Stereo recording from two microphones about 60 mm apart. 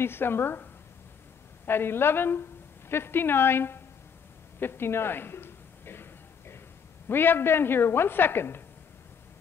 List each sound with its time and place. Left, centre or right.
0.0 s a woman's voice: left
1.7 s a woman's voice: left
4.6 s a sound: left
7.1 s a woman's voice: left